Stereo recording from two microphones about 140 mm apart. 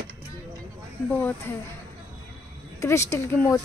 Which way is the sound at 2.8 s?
20° left (ahead or behind).